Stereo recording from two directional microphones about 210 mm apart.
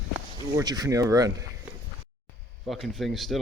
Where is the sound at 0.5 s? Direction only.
20° right (ahead or behind).